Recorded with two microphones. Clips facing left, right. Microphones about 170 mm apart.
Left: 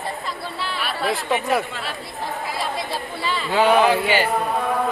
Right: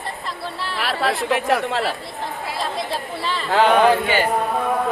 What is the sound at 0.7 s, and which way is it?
Chatter, 90° right.